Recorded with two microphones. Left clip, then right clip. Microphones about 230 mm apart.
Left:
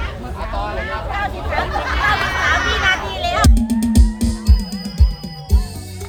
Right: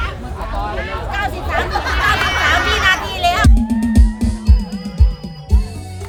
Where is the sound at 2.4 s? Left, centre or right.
Right.